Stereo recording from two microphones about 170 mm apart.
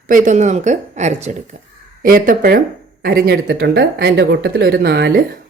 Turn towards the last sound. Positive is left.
turn(degrees=-70)  # may be behind; listen again after turning